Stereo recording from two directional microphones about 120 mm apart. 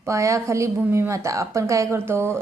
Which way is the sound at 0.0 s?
25° right (ahead or behind).